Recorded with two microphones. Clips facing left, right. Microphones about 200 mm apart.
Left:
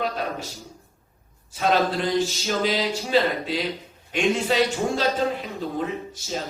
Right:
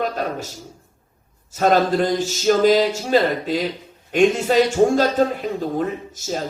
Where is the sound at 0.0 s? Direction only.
45° right (ahead or behind).